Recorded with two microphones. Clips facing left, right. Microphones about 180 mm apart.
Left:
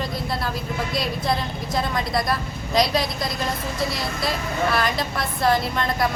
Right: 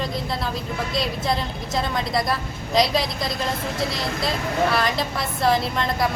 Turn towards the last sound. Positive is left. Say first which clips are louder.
# even
turn(degrees=0)  # may be behind; listen again after turning